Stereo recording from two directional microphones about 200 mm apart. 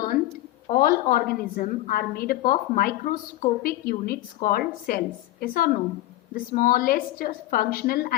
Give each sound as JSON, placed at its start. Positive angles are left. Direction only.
{"t": 0.7, "sound": "a woman's voice", "side_deg": 45}